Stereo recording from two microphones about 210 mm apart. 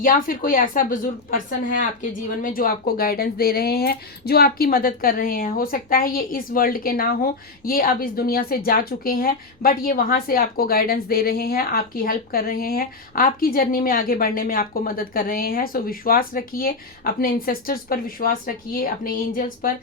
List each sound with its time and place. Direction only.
0.0 s a woman's voice: 40° left (ahead or behind)